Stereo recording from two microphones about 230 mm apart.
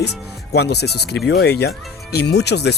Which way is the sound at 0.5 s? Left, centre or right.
Left.